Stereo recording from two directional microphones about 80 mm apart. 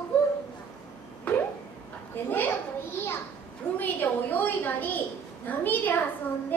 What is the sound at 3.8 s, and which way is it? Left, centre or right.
Speech, left.